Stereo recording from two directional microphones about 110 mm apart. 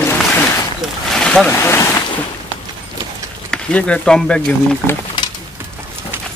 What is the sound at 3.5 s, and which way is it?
Speech, 10° left (ahead or behind).